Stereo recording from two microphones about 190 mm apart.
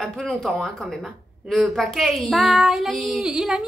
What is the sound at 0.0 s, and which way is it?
A woman's voice, centre (ahead or behind).